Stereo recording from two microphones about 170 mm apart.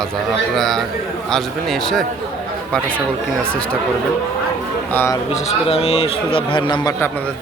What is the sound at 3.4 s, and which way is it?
Speech, 5° left (ahead or behind).